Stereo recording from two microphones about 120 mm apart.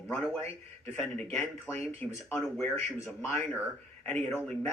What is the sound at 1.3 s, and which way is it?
Speech, 20° left (ahead or behind).